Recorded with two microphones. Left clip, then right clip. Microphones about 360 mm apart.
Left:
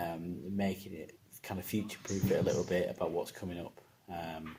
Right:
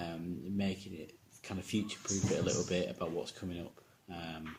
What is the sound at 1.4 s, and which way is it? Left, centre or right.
Speech, centre.